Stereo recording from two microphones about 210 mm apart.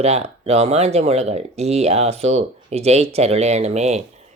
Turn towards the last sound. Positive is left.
turn(degrees=-30)  # may be behind; listen again after turning